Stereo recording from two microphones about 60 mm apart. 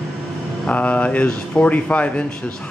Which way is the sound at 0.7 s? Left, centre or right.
Left.